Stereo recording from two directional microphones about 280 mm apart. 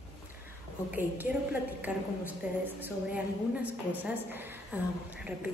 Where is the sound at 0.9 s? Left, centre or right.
Centre.